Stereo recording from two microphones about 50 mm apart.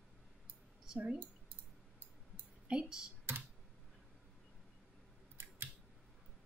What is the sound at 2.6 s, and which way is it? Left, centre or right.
Speech, centre.